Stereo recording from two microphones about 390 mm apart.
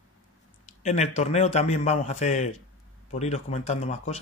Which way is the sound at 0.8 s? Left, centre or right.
Centre.